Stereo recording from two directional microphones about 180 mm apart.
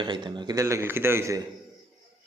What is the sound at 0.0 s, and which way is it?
A man's voice, 25° right (ahead or behind).